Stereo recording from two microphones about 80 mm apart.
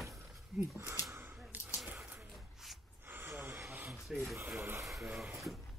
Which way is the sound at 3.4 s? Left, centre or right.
Right.